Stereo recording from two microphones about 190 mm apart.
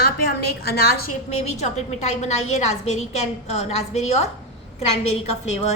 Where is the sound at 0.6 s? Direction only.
55° left (ahead or behind).